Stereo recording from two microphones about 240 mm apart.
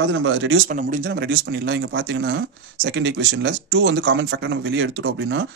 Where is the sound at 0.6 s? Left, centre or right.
Right.